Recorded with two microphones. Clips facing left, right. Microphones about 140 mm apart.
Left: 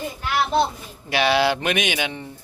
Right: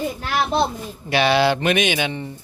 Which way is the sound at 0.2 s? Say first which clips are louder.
Left 3 dB; 45° right (ahead or behind).